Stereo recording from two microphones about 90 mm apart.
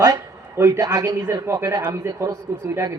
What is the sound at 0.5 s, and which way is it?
Speech, 30° right (ahead or behind).